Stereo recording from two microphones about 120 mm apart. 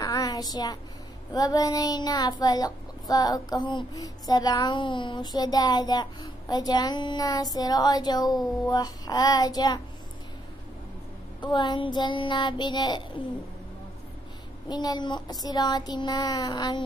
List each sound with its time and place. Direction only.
0.0 s child singing: 30° left (ahead or behind)
11.4 s child singing: 40° left (ahead or behind)
14.7 s child singing: 35° left (ahead or behind)